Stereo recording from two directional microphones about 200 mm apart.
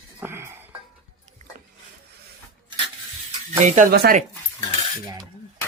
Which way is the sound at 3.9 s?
50° right (ahead or behind).